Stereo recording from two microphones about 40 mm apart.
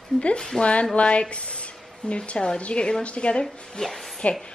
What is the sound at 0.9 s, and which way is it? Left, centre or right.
A woman's voice, left.